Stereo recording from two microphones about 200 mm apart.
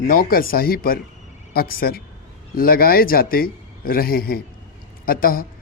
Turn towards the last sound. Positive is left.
turn(degrees=45)  # may be behind; listen again after turning